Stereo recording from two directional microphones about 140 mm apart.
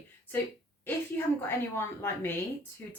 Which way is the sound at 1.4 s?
15° left (ahead or behind).